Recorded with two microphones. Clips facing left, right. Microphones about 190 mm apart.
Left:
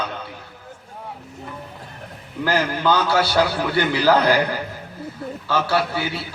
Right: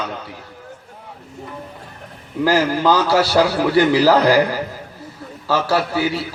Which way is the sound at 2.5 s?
35° right (ahead or behind).